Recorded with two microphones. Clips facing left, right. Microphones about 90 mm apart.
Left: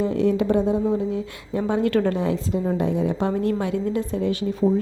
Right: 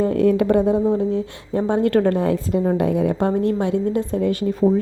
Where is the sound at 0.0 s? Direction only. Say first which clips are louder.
Right 4 dB; 50° right (ahead or behind).